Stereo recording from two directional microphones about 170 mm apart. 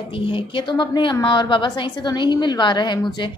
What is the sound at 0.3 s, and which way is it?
A woman's voice, 30° left (ahead or behind).